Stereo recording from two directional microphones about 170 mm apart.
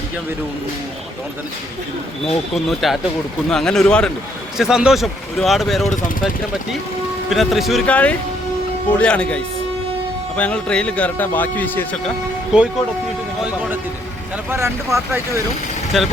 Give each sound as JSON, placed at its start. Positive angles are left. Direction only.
{"t": 2.2, "sound": "speech", "side_deg": 0}
{"t": 7.3, "sound": "speech", "side_deg": 0}
{"t": 12.5, "sound": "speech", "side_deg": -5}
{"t": 14.5, "sound": "speech", "side_deg": -15}
{"t": 15.9, "sound": "speech", "side_deg": 0}